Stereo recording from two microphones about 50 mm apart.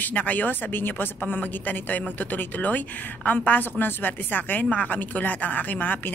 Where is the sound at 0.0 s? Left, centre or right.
Left.